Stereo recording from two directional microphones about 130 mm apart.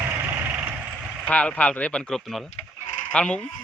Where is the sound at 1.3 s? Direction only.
10° left (ahead or behind).